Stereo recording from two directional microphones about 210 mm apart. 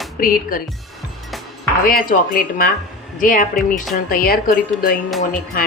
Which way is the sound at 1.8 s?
40° left (ahead or behind).